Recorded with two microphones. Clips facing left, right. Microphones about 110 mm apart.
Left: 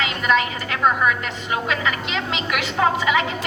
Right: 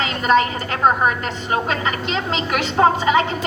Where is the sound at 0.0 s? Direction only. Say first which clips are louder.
Right 4 dB; 35° right (ahead or behind).